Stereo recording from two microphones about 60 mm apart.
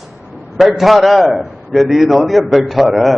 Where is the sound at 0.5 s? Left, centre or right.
Centre.